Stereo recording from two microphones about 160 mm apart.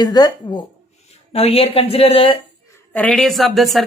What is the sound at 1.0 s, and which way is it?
Speech, 40° left (ahead or behind).